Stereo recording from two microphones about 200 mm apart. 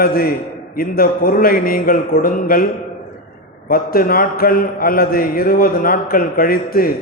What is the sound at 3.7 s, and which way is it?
A man's voice, 50° left (ahead or behind).